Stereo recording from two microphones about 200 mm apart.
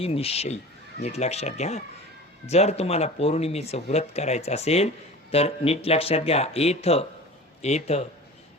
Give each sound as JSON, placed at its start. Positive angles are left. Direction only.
{"t": 0.0, "sound": "speech", "side_deg": 30}